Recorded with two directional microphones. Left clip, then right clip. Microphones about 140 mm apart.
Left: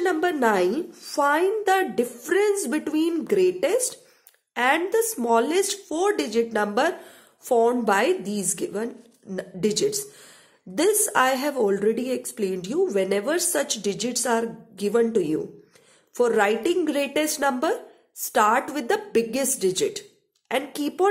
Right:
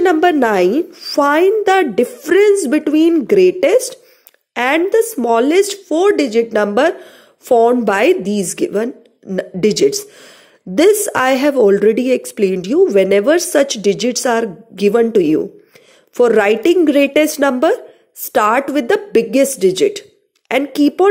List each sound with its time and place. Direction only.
0.0 s speech: 35° right (ahead or behind)